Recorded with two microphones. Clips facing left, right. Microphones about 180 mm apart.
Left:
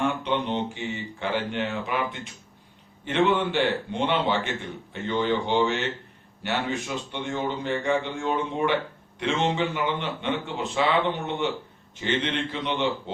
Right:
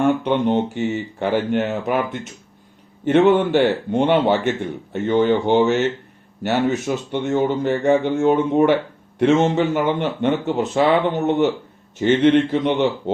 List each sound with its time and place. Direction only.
0.0 s speech: 45° right (ahead or behind)
3.1 s speech: 45° right (ahead or behind)